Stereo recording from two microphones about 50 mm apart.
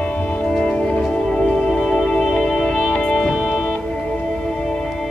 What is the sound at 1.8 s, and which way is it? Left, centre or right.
Music, centre.